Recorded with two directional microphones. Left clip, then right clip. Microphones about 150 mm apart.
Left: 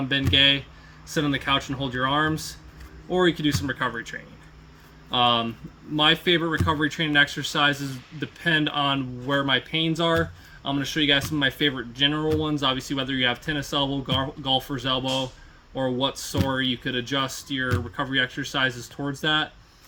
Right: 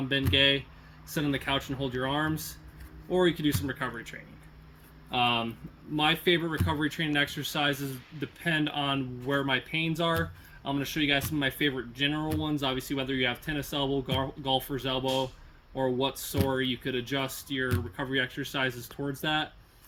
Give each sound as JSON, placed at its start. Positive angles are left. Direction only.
{"t": 0.3, "sound": "speech", "side_deg": 30}
{"t": 5.1, "sound": "speech", "side_deg": 35}